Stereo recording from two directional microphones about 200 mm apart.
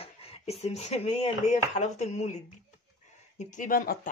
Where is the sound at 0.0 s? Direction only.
30° left (ahead or behind).